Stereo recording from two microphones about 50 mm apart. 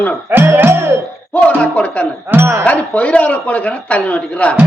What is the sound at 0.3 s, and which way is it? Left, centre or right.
Music, right.